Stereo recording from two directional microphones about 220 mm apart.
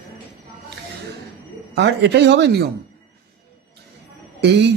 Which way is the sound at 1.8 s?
50° right (ahead or behind).